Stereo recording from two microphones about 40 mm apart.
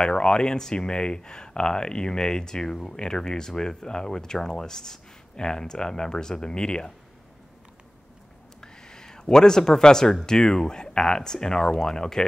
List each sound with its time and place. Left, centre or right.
0.0 s speech: left
8.5 s a sound: centre
10.2 s speech: centre